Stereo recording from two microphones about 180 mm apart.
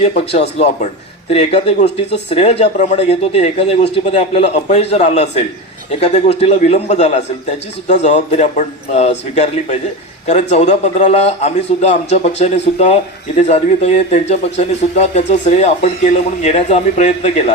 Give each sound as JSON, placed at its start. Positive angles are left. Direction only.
{"t": 0.0, "sound": "speech", "side_deg": 35}